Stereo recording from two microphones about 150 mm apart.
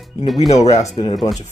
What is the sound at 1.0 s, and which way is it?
Speech, 30° left (ahead or behind).